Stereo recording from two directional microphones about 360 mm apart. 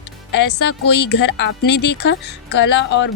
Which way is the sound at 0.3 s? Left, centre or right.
Left.